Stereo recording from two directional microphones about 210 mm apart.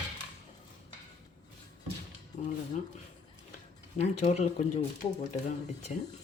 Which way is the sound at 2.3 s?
35° left (ahead or behind).